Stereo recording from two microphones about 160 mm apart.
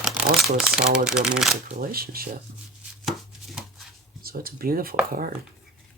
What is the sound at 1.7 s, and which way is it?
Speech, 65° right (ahead or behind).